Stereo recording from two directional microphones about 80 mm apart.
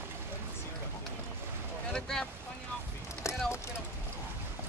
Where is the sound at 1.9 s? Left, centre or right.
Centre.